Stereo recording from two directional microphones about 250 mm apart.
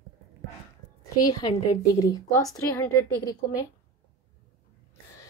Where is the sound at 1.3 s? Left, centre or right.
Centre.